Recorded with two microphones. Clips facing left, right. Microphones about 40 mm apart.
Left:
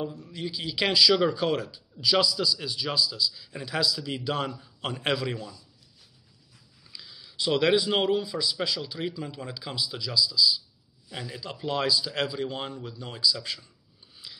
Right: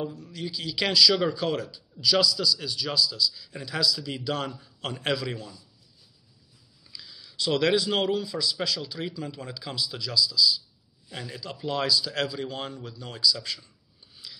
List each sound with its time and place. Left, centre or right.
0.1 s a man's voice: left
7.0 s speech: centre
12.1 s a man's voice: centre
14.2 s a sound: left